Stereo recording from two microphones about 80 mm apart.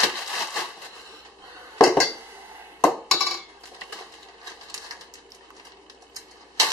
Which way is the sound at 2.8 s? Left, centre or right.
Centre.